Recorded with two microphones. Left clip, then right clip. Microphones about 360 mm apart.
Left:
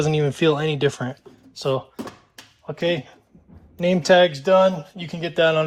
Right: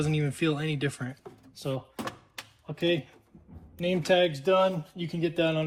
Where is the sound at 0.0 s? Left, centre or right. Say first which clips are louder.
Left 10 dB; centre.